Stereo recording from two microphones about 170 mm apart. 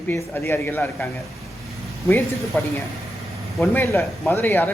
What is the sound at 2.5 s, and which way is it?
A man's voice, 10° left (ahead or behind).